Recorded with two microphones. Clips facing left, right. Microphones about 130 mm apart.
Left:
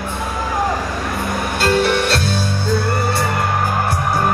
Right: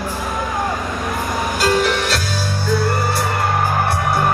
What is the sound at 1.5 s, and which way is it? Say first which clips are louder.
Music: left 2 dB; 65° left (ahead or behind).